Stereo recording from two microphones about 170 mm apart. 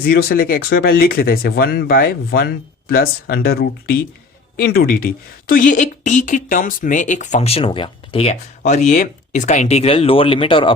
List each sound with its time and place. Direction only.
0.0 s speech: 65° left (ahead or behind); by 10.8 s 30° left (ahead or behind)